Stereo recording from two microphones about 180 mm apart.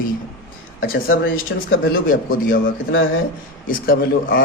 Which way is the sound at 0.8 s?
55° left (ahead or behind).